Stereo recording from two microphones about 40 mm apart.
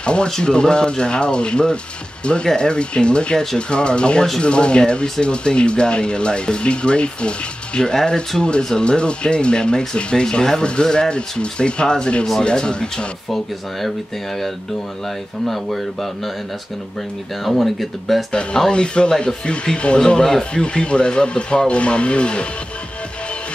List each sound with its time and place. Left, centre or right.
0.0 s speech: left
13.3 s speech: centre
15.4 s speech: centre
17.6 s speech: centre
18.7 s speech: left